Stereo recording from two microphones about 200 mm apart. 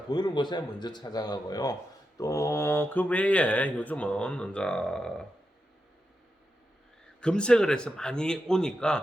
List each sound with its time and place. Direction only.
0.1 s speech: 20° left (ahead or behind); by 5.1 s 5° left (ahead or behind)
7.2 s speech: 5° left (ahead or behind)